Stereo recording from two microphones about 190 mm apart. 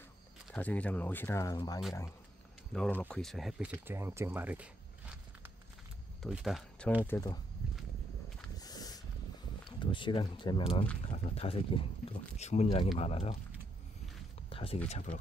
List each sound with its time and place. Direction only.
0.5 s speech: 5° left (ahead or behind)
2.7 s speech: 5° left (ahead or behind)
7.1 s speech: 15° left (ahead or behind)
8.5 s a sound: 20° left (ahead or behind)
9.7 s speech: 25° left (ahead or behind)
14.5 s a sound: 30° left (ahead or behind)
14.9 s speech: 35° left (ahead or behind)